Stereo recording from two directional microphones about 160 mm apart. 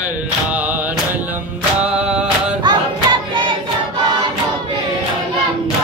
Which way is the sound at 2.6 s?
30° right (ahead or behind).